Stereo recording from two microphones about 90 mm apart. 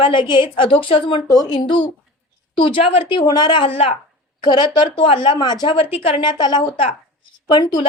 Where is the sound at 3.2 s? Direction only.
50° left (ahead or behind); by 3.9 s 90° left.